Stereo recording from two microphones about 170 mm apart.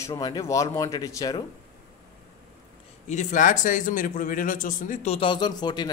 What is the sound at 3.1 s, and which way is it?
A man's voice, 45° left (ahead or behind).